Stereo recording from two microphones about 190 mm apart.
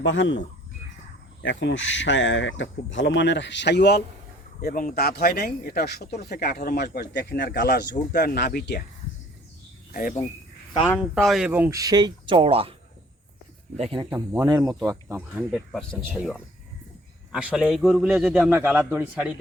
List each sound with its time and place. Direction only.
0.0 s speech: 75° left (ahead or behind)
4.6 s speech: 45° left (ahead or behind)
9.9 s speech: 45° left (ahead or behind)
11.1 s speech: centre (ahead or behind); by 12.7 s 30° right (ahead or behind)
14.1 s speech: 15° right (ahead or behind)
14.8 s a man's voice: 10° right (ahead or behind)